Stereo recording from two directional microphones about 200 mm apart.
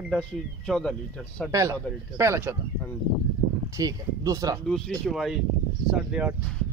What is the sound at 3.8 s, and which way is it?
Speech, 20° right (ahead or behind).